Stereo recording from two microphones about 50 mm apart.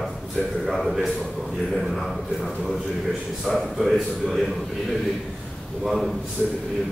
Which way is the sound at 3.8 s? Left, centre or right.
Centre.